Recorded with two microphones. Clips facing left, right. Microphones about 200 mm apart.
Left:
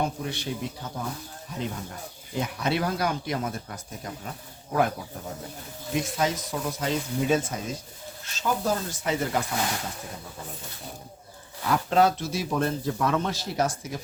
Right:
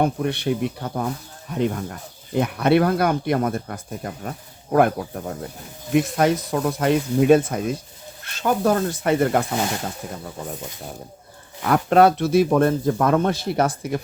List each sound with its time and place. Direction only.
0.0 s speech: 60° right (ahead or behind)
11.6 s speech: 60° right (ahead or behind)